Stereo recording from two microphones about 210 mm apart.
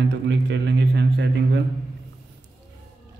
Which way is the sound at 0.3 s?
55° right (ahead or behind).